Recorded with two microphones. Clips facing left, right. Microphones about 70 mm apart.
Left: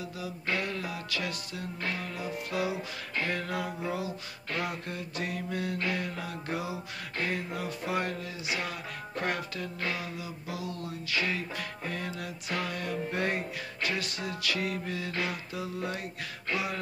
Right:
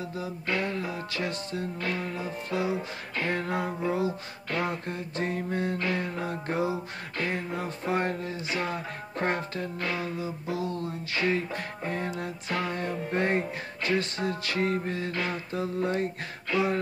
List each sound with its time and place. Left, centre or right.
0.0 s music: right